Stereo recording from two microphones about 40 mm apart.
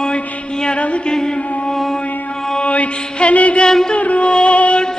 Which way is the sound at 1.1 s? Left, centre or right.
Left.